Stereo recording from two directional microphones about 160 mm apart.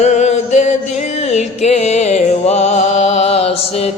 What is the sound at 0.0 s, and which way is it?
Music, 45° left (ahead or behind).